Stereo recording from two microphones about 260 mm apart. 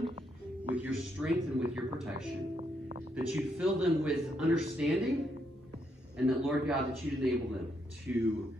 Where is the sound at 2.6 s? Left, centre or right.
Right.